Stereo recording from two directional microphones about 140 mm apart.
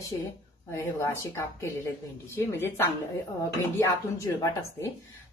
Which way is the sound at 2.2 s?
20° left (ahead or behind).